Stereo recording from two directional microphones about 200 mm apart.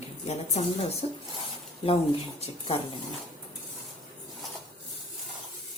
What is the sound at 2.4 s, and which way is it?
Speech, 30° left (ahead or behind).